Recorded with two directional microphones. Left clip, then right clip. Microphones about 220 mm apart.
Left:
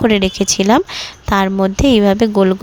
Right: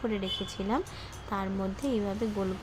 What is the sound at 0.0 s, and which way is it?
Speech, 50° left (ahead or behind).